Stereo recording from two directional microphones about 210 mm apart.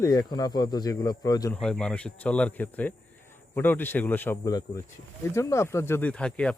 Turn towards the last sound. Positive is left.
turn(degrees=5)  # may be behind; listen again after turning